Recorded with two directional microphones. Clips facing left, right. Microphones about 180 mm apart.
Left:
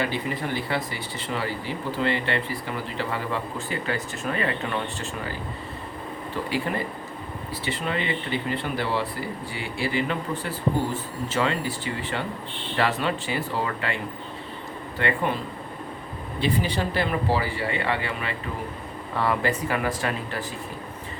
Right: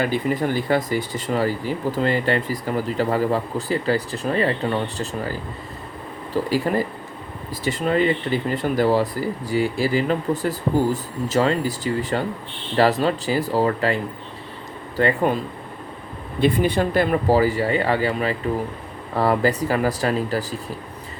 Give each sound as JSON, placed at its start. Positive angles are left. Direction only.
{"t": 0.0, "sound": "speech", "side_deg": -45}
{"t": 6.3, "sound": "speech", "side_deg": -40}
{"t": 16.4, "sound": "speech", "side_deg": -50}